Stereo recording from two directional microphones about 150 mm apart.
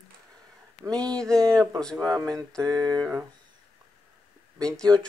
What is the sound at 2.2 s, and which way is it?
Speech, 25° right (ahead or behind).